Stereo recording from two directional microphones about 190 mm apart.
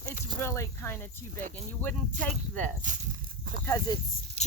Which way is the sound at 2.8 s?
45° right (ahead or behind).